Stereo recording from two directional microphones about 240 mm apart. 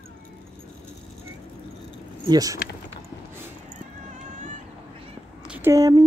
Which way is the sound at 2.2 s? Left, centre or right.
Centre.